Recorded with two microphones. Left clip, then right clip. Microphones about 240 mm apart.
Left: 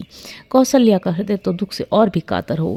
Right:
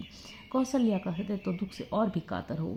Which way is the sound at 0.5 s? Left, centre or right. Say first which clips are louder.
Left 16 dB; left.